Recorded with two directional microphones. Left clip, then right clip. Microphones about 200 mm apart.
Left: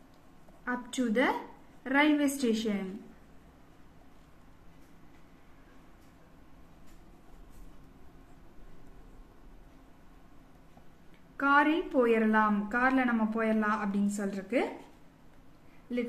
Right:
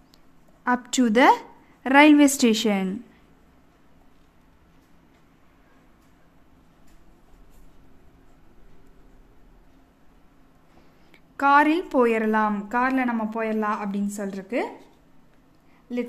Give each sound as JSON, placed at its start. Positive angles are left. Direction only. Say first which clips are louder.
{"t": 0.7, "sound": "a woman's voice", "louder": "right 11 dB", "side_deg": -60}
{"t": 11.3, "sound": "a woman's voice", "louder": "right 7 dB", "side_deg": -55}